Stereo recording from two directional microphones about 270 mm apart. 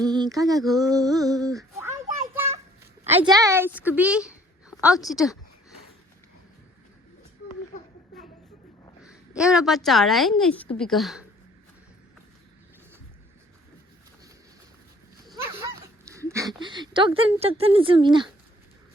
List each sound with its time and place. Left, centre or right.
0.0 s a sound: centre
0.7 s speech: centre
3.0 s a woman's voice: right
3.3 s a woman's voice: centre
9.0 s a woman's voice: centre
15.3 s speech: centre